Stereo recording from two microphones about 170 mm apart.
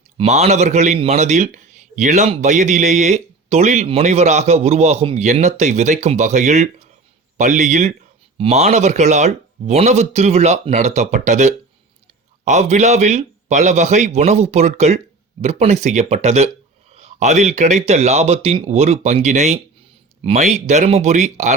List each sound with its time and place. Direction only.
0.2 s a man's voice: 40° right (ahead or behind)